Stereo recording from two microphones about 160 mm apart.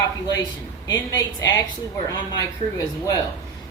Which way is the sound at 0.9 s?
20° left (ahead or behind).